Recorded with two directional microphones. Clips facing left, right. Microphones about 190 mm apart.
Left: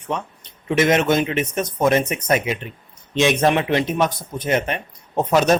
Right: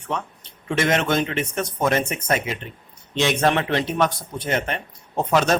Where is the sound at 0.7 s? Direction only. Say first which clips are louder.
Left 4 dB; 15° left (ahead or behind).